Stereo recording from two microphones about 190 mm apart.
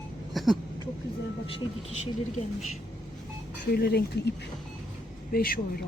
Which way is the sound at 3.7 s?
55° left (ahead or behind).